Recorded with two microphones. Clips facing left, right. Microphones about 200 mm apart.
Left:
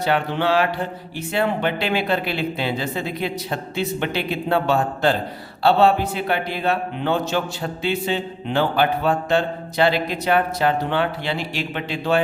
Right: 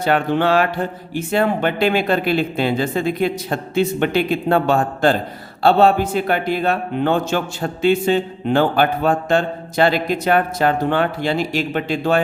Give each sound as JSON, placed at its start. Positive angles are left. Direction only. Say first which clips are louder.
{"t": 0.0, "sound": "a man's voice", "louder": "right 4 dB", "side_deg": -50}